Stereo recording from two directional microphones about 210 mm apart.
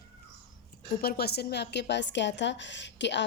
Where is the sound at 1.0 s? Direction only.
50° left (ahead or behind).